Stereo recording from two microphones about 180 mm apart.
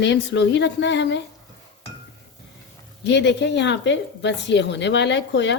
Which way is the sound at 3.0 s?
75° left (ahead or behind).